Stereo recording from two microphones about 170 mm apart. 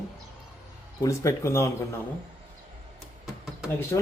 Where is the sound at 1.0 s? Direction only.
15° left (ahead or behind).